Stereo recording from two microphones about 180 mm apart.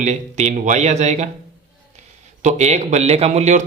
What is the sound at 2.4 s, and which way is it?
Speech, 40° right (ahead or behind).